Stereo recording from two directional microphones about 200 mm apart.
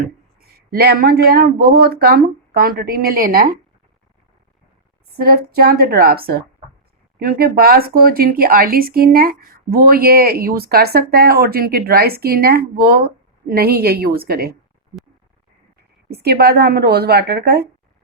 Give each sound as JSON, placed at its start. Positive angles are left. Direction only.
{"t": 0.0, "sound": "speech", "side_deg": -50}
{"t": 5.1, "sound": "speech", "side_deg": -50}
{"t": 16.1, "sound": "speech", "side_deg": -55}